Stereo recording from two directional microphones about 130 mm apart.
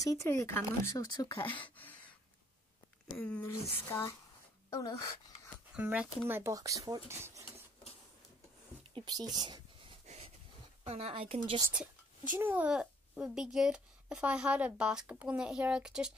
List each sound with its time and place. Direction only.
0.0 s speech: 25° left (ahead or behind)
1.0 s speech: 35° left (ahead or behind)
3.2 s speech: 10° left (ahead or behind)
5.8 s a child's voice: 10° right (ahead or behind)
8.9 s speech: 35° right (ahead or behind)
10.9 s speech: 50° right (ahead or behind)
11.7 s a sound: 10° right (ahead or behind)
12.4 s a child's voice: 15° right (ahead or behind)